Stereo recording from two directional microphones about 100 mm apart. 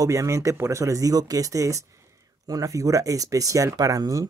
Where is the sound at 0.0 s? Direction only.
30° right (ahead or behind).